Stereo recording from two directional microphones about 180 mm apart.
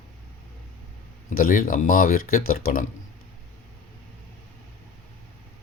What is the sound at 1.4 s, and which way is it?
Speech, 50° left (ahead or behind).